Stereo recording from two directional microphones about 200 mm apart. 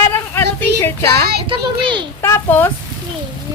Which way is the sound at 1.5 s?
25° right (ahead or behind).